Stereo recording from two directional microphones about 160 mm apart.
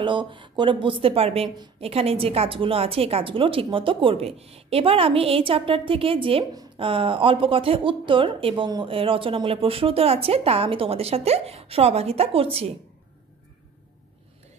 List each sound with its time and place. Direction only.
0.0 s speech: 30° right (ahead or behind)